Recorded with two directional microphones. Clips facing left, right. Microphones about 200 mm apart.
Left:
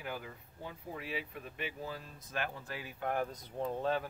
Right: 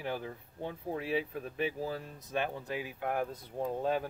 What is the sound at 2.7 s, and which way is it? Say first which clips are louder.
Speech: right 3 dB; 15° right (ahead or behind).